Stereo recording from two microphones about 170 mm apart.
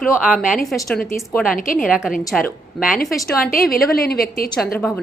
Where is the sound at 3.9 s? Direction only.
65° left (ahead or behind).